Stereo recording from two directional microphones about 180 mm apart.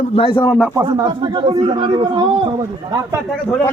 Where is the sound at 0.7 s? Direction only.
20° right (ahead or behind).